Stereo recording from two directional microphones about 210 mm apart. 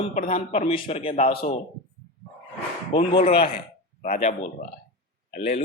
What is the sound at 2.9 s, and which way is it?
Speech, 30° left (ahead or behind).